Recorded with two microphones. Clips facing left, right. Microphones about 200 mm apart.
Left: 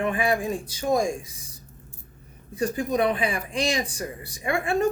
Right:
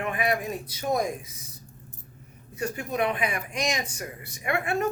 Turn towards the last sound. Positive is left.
turn(degrees=30)  # may be behind; listen again after turning